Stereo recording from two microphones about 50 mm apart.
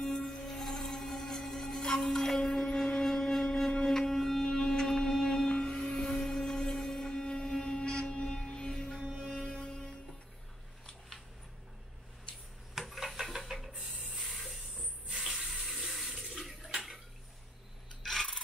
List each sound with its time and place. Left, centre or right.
0.0 s music: centre
12.7 s a sound: centre
15.1 s water tap: centre
16.7 s tick-tock: centre
18.0 s rub: centre